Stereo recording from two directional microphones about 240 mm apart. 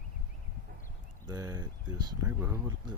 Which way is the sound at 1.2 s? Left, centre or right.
Centre.